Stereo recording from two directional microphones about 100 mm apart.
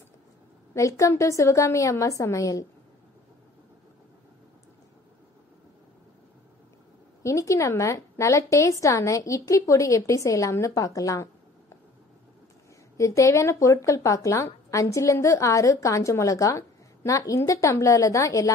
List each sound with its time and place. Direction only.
0.7 s speech: 30° left (ahead or behind)
7.2 s speech: 30° left (ahead or behind)
12.9 s speech: 30° left (ahead or behind)